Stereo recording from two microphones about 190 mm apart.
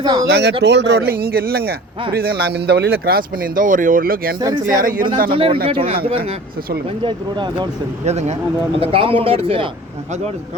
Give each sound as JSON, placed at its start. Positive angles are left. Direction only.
{"t": 0.0, "sound": "speech", "side_deg": -25}
{"t": 0.3, "sound": "speech", "side_deg": -60}
{"t": 4.4, "sound": "speech", "side_deg": -20}
{"t": 4.8, "sound": "speech", "side_deg": -45}
{"t": 5.3, "sound": "speech", "side_deg": -25}
{"t": 7.0, "sound": "speech", "side_deg": -25}
{"t": 8.0, "sound": "speech", "side_deg": -35}